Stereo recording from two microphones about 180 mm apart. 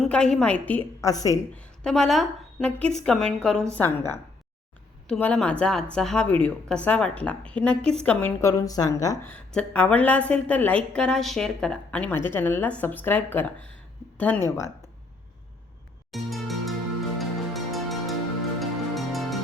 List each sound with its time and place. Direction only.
0.0 s a woman's voice: 5° left (ahead or behind); by 1.4 s 20° left (ahead or behind)
1.5 s a woman's voice: 5° left (ahead or behind)
9.3 s a woman's voice: 5° left (ahead or behind)
16.1 s music: centre (ahead or behind)